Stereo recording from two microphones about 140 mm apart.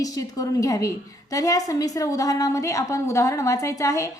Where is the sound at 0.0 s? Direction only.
25° left (ahead or behind).